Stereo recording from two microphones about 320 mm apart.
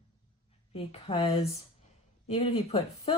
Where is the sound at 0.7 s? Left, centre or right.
Centre.